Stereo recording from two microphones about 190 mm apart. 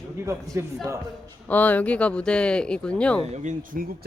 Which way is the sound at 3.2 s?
35° right (ahead or behind).